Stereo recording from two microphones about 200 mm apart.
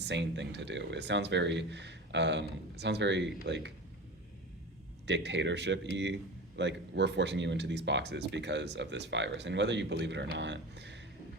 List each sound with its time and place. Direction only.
0.0 s speech: 60° right (ahead or behind)
5.0 s speech: 60° right (ahead or behind)